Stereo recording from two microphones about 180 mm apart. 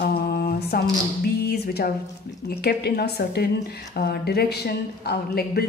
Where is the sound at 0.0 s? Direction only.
60° left (ahead or behind).